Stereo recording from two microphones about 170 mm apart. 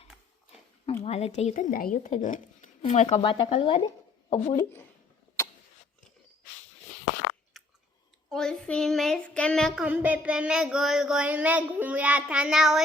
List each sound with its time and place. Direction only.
1.0 s speech: 40° left (ahead or behind)
3.2 s speech: 30° left (ahead or behind)
4.3 s speech: 45° left (ahead or behind)
4.5 s speech: 15° left (ahead or behind)
7.6 s chewing: centre (ahead or behind)
8.3 s speech: 5° left (ahead or behind)